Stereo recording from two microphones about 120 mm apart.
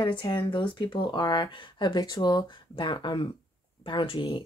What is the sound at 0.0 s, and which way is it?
Speech, 40° left (ahead or behind).